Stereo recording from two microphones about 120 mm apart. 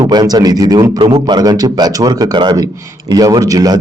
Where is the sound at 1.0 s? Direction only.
40° right (ahead or behind).